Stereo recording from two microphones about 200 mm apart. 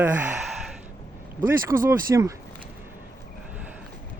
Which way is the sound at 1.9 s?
15° right (ahead or behind).